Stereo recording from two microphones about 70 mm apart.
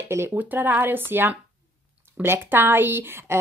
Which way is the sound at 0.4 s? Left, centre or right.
Right.